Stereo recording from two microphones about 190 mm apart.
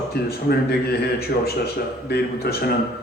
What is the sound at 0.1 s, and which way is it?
A man's voice, 55° left (ahead or behind).